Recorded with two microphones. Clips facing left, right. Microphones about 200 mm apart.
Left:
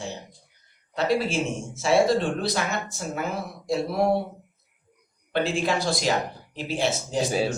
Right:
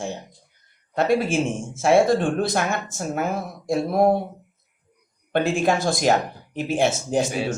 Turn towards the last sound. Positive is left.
turn(degrees=35)  # may be behind; listen again after turning